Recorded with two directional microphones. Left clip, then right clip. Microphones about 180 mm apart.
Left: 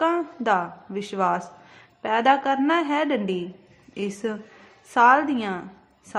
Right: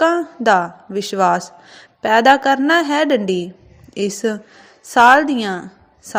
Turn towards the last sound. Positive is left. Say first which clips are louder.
# right 7 dB
turn(degrees=-30)  # may be behind; listen again after turning